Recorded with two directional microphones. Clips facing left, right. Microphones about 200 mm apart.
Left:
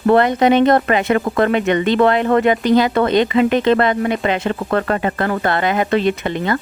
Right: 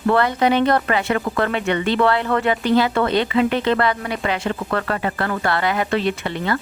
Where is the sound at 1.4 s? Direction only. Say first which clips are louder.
Left 6 dB; 20° left (ahead or behind).